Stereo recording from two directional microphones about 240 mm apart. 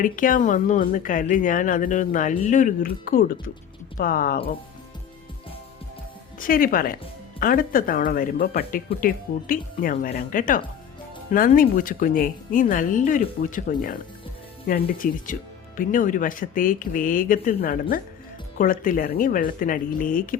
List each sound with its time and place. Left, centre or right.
0.0 s speech: left
6.4 s speech: left